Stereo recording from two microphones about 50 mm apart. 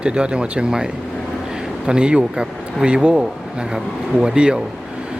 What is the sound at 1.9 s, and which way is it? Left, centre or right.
A man's voice, centre.